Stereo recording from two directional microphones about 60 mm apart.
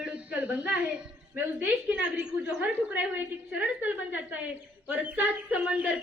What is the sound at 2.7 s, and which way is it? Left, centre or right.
A woman's voice, right.